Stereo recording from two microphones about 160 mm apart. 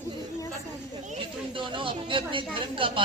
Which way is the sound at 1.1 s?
35° right (ahead or behind).